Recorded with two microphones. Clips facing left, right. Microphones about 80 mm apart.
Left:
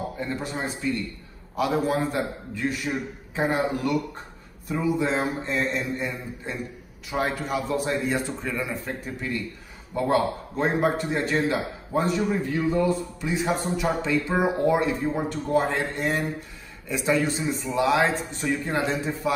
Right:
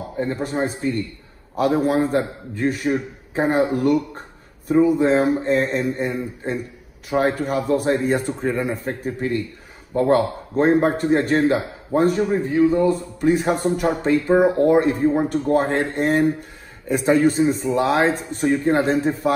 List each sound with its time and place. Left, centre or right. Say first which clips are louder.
0.2 s a man's voice: right 11 dB; right
12.4 s a man's voice: right 9 dB; right
13.2 s speech: right 11 dB; right